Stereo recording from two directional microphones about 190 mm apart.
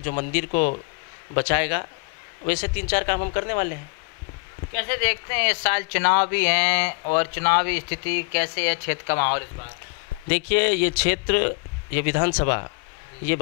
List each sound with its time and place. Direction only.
0.2 s speech: 15° left (ahead or behind)
4.7 s speech: 15° left (ahead or behind)